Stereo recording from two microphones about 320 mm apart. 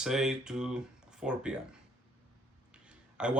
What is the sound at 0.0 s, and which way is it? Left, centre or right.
Speech, centre.